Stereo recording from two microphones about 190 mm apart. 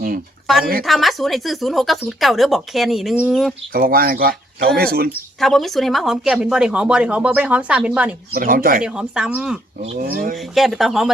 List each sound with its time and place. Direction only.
0.5 s speech: centre (ahead or behind)
3.7 s speech: 50° right (ahead or behind)
5.4 s speech: centre (ahead or behind)
8.3 s speech: 50° right (ahead or behind)
8.8 s speech: 5° right (ahead or behind)
10.0 s speech: 50° right (ahead or behind)
10.5 s speech: centre (ahead or behind)